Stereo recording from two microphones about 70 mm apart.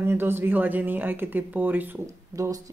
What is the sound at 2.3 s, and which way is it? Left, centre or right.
Speech, right.